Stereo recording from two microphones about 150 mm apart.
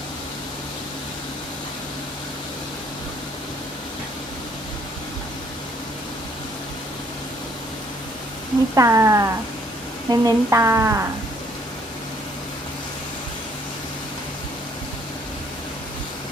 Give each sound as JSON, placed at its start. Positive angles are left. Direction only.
{"t": 8.7, "sound": "a woman's voice", "side_deg": -20}